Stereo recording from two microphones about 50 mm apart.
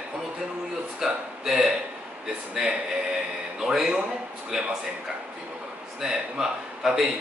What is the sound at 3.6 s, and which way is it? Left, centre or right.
A man's voice, centre.